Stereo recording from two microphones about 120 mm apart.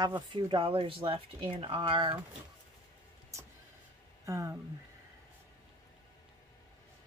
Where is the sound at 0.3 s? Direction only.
40° right (ahead or behind).